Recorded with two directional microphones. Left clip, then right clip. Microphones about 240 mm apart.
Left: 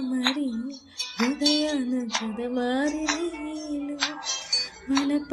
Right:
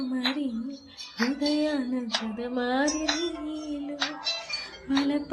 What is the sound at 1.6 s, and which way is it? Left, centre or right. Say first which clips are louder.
Music: left 1 dB; left.